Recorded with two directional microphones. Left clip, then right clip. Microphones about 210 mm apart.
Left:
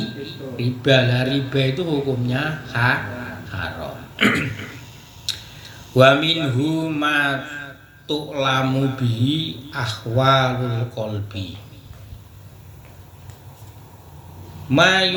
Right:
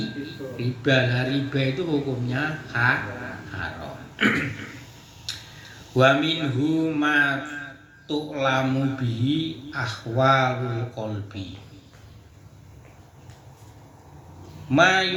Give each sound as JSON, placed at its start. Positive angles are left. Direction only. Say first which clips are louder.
{"t": 0.3, "sound": "a man's voice", "louder": "left 4 dB", "side_deg": 50}
{"t": 3.5, "sound": "a sound", "louder": "left 6 dB", "side_deg": 50}
{"t": 6.0, "sound": "a man's voice", "louder": "left 5 dB", "side_deg": 50}
{"t": 14.7, "sound": "a man's voice", "louder": "left 3 dB", "side_deg": 50}